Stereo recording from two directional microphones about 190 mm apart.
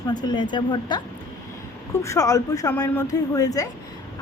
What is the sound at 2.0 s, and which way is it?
Speech, 15° left (ahead or behind).